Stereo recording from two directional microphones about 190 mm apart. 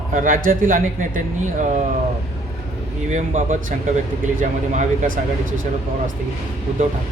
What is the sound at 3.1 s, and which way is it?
A man's voice, 40° right (ahead or behind).